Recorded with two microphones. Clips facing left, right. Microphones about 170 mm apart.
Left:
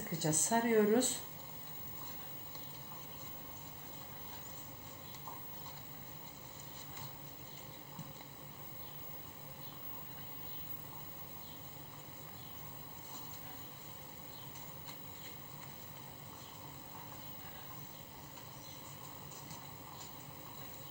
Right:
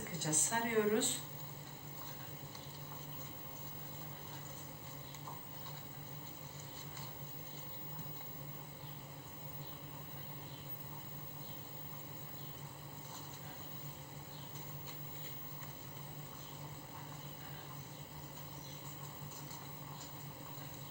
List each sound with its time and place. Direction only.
0.2 s speech: 40° left (ahead or behind)